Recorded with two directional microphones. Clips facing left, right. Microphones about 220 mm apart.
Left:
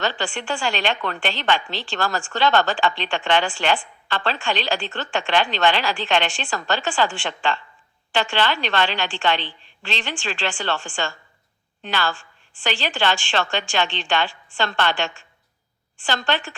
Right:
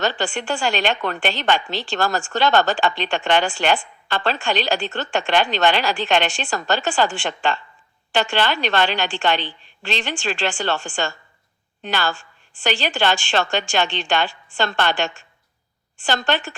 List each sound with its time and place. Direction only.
0.0 s a woman's voice: 40° right (ahead or behind)